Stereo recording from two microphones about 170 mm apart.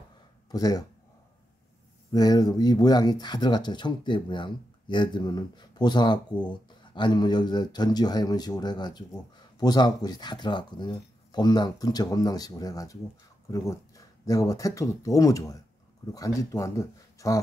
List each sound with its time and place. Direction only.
0.5 s speech: 20° left (ahead or behind)
2.1 s speech: 20° left (ahead or behind)